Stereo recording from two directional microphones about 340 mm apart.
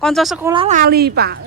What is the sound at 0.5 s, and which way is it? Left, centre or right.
Speech, centre.